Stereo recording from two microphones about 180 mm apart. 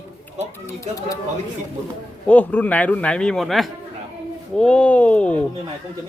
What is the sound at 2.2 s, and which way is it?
A man's voice, 10° left (ahead or behind).